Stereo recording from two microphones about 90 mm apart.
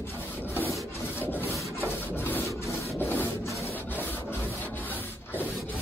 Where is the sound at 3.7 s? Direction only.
20° left (ahead or behind).